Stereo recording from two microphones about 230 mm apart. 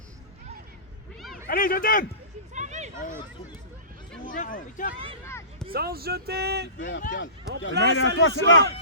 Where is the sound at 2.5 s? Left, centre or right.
Right.